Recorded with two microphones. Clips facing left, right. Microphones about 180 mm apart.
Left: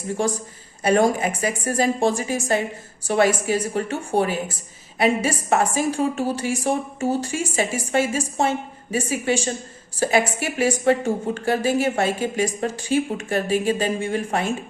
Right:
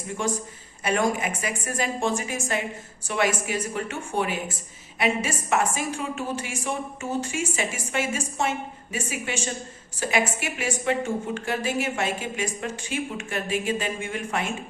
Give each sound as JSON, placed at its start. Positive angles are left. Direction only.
{"t": 0.2, "sound": "a woman's voice", "side_deg": 35}